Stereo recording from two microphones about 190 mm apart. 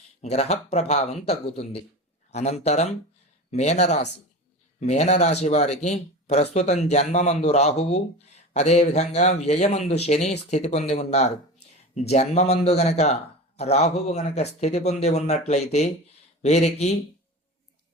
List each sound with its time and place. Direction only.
0.2 s speech: 35° left (ahead or behind)